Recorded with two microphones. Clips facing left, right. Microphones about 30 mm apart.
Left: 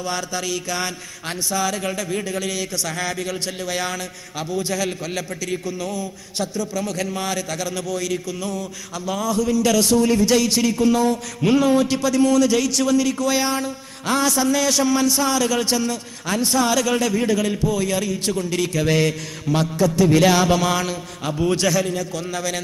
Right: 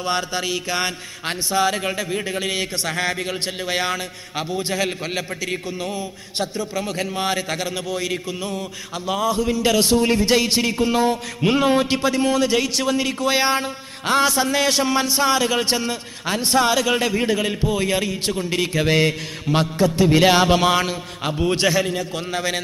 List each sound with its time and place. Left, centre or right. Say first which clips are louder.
0.0 s a man's voice: right 3 dB; right
1.9 s a man's voice: right 1 dB; right